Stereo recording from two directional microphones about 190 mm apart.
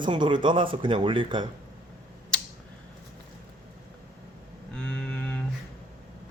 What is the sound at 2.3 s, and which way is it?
Tick-tock, 5° left (ahead or behind).